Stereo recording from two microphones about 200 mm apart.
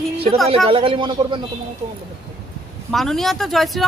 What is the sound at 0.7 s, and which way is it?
Speech, 25° right (ahead or behind).